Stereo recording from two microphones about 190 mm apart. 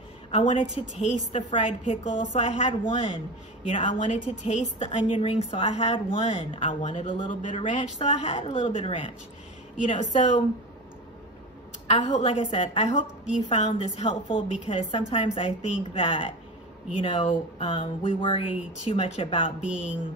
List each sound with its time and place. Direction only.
0.3 s a woman's voice: 35° left (ahead or behind)
7.2 s a woman's voice: 40° left (ahead or behind)
11.9 s a woman's voice: 35° left (ahead or behind)
19.6 s speech: 5° right (ahead or behind)